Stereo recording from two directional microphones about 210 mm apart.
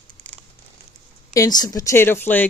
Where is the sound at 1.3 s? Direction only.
15° left (ahead or behind).